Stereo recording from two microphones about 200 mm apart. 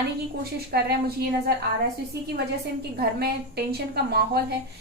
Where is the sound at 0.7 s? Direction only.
50° right (ahead or behind).